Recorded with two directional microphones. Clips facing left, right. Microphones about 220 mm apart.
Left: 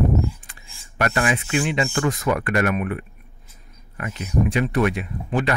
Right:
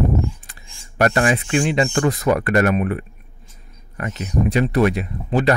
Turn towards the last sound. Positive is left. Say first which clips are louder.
# right 5 dB
turn(degrees=-40)  # may be behind; listen again after turning